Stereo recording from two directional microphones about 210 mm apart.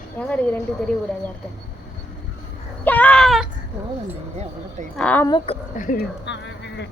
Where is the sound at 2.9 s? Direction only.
5° left (ahead or behind).